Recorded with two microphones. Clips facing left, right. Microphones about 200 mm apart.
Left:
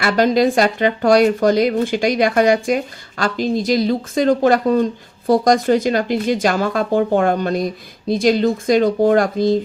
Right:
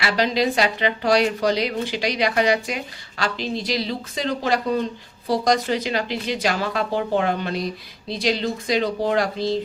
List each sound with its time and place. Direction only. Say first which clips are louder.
0.0 s speech: left 7 dB; 50° left (ahead or behind)